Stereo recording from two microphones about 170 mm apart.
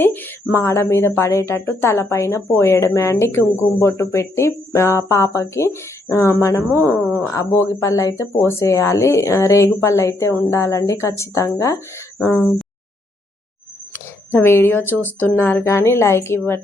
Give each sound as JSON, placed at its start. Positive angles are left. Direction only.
{"t": 0.0, "sound": "speech", "side_deg": 10}
{"t": 13.9, "sound": "speech", "side_deg": 15}